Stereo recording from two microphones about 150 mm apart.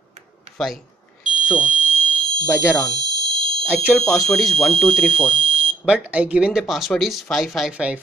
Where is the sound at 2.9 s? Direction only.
30° right (ahead or behind).